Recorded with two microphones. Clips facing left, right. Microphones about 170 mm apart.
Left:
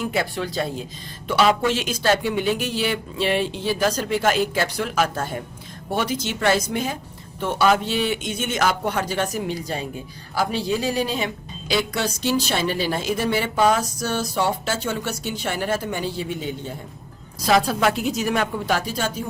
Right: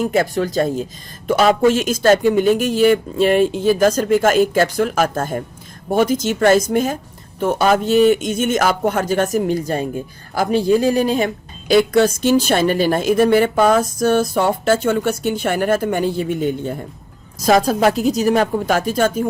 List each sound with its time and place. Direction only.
0.0 s a woman's voice: 45° right (ahead or behind)